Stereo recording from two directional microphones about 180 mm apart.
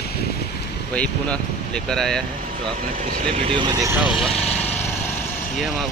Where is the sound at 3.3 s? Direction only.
30° right (ahead or behind); by 4.3 s 5° right (ahead or behind).